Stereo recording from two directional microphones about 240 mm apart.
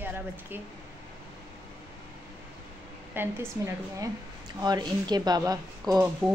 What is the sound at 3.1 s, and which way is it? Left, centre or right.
Speech, centre.